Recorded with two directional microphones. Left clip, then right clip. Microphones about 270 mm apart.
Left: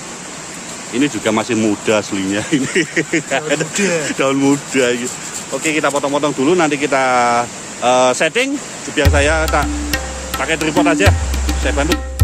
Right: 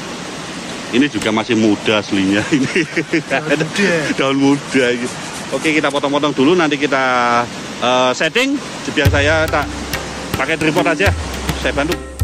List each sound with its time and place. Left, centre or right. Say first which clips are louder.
0.9 s speech: even; centre
3.7 s speech: right 3 dB; left
4.2 s speech: even; centre